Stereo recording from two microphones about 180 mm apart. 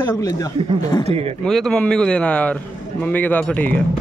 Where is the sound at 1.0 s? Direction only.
35° right (ahead or behind).